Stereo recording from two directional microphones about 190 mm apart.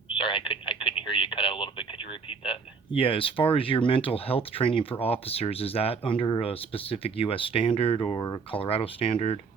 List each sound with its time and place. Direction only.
0.1 s telephone: 25° left (ahead or behind)
2.4 s speech: 30° left (ahead or behind)